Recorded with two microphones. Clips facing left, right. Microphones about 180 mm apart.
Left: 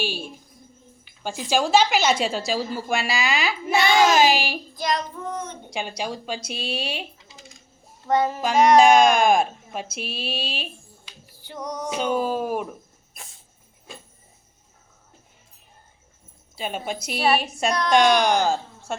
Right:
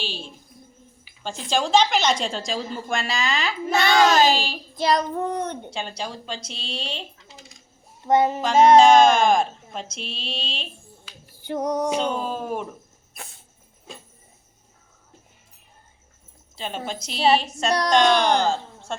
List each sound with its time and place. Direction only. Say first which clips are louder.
0.0 s a woman's voice: left 5 dB; 10° left (ahead or behind)
4.8 s child singing: right 5 dB; 35° right (ahead or behind)
5.1 s a sound: right 6 dB; 65° right (ahead or behind)
5.7 s a woman's voice: left 2 dB; 10° left (ahead or behind)
8.0 s child singing: right 2 dB; 20° right (ahead or behind)
8.8 s a woman's voice: right 1 dB; 10° left (ahead or behind)
11.4 s music: right 8 dB; 55° right (ahead or behind)
12.1 s a woman's voice: left 4 dB; 10° left (ahead or behind)
16.6 s a woman's voice: left 2 dB; 10° left (ahead or behind)